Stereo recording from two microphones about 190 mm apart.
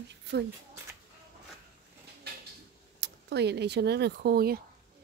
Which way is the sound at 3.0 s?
65° right (ahead or behind).